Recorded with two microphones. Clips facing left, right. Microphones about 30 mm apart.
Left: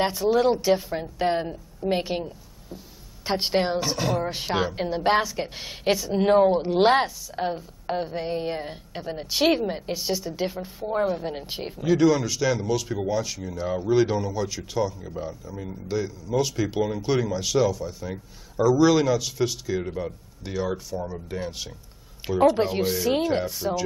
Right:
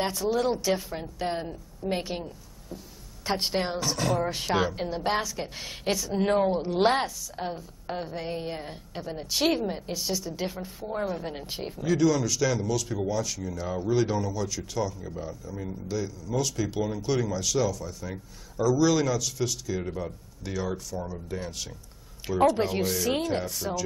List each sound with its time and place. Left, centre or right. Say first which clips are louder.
0.0 s a woman's voice: left 5 dB; centre